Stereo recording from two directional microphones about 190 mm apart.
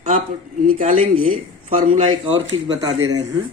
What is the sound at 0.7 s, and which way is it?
A man's voice, 35° right (ahead or behind).